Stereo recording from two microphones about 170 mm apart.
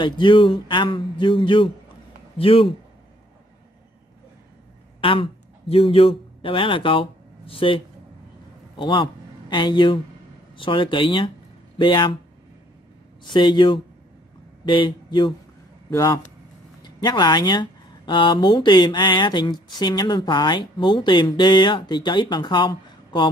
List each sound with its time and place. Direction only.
0.0 s speech: 30° left (ahead or behind)
5.0 s a man's voice: 30° left (ahead or behind)
13.2 s speech: 25° left (ahead or behind)